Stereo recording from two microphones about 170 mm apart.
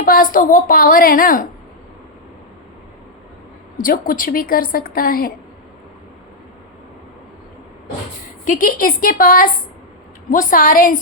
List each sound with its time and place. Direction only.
0.0 s a woman's voice: 55° left (ahead or behind)
3.8 s a woman's voice: 55° left (ahead or behind)
8.4 s a woman's voice: 55° left (ahead or behind)